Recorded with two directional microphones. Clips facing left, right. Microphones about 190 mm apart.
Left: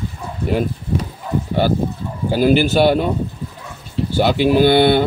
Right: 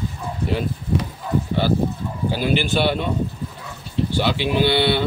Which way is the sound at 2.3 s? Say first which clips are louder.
Left 8 dB; 45° left (ahead or behind).